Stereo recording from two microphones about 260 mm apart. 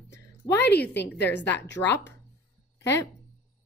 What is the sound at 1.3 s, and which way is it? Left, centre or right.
A woman's voice, centre.